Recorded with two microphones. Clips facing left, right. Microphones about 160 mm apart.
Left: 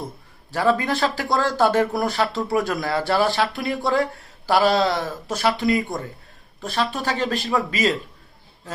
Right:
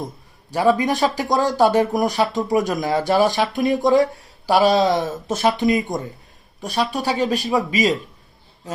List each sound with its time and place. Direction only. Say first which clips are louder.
0.5 s speech: right 3 dB; 15° right (ahead or behind)